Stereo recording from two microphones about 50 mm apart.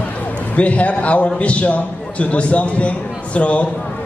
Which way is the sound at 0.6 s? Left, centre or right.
Left.